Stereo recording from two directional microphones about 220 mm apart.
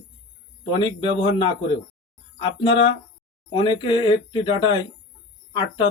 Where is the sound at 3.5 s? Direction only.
20° left (ahead or behind).